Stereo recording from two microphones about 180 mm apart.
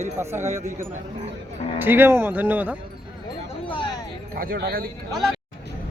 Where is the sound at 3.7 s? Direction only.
25° left (ahead or behind).